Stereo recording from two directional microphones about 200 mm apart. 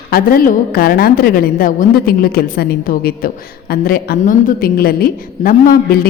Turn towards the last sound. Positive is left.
turn(degrees=45)  # may be behind; listen again after turning